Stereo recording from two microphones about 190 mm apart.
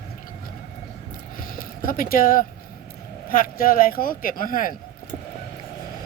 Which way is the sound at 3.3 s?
45° left (ahead or behind).